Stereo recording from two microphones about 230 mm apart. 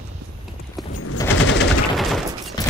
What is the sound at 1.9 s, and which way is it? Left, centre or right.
Fusillade, centre.